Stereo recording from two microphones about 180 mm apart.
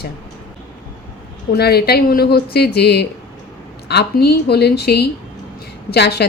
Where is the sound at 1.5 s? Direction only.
60° left (ahead or behind).